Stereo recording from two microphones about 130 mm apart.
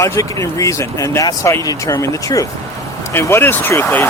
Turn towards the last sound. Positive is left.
turn(degrees=20)  # may be behind; listen again after turning